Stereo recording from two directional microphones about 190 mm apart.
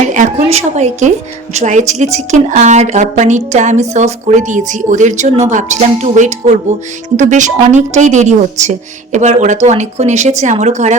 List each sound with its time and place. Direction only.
0.1 s a woman's voice: 40° right (ahead or behind)